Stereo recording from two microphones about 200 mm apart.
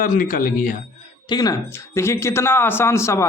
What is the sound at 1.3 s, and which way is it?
A man's voice, 20° left (ahead or behind).